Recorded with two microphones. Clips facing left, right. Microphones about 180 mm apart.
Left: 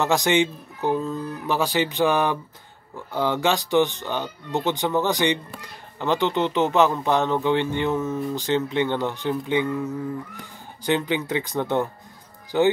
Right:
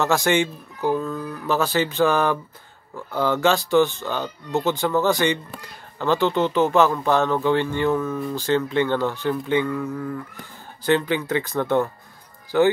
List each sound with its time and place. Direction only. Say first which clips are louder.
0.0 s speech: even; 15° left (ahead or behind)